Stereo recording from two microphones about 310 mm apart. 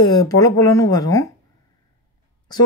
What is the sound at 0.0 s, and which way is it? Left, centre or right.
Speech, centre.